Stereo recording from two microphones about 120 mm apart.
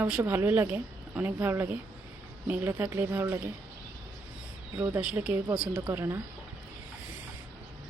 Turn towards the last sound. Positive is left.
turn(degrees=-20)  # may be behind; listen again after turning